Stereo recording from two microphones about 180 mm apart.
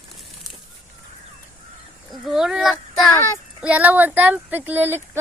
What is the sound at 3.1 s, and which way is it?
Speech, 15° left (ahead or behind).